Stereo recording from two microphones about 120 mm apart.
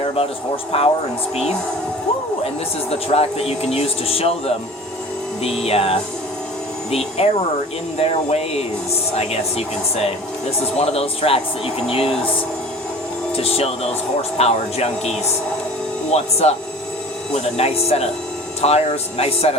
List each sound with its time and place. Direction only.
0.1 s speech: 50° left (ahead or behind)
3.1 s speech: 60° left (ahead or behind)
7.2 s speech: 55° left (ahead or behind)
13.3 s speech: 55° left (ahead or behind)